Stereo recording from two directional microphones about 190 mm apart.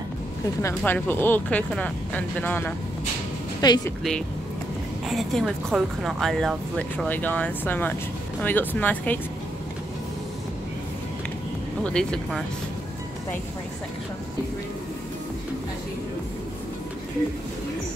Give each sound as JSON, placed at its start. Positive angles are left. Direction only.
{"t": 0.6, "sound": "speech", "side_deg": 10}
{"t": 3.6, "sound": "a woman's voice", "side_deg": 20}
{"t": 5.0, "sound": "speech", "side_deg": 0}
{"t": 11.8, "sound": "speech", "side_deg": 5}